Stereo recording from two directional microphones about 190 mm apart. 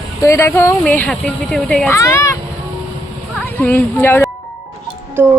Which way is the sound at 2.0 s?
15° left (ahead or behind).